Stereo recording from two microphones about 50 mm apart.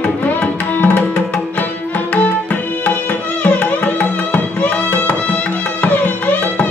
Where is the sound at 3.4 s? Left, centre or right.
Left.